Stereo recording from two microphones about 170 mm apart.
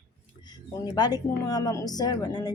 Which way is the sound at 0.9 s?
20° left (ahead or behind).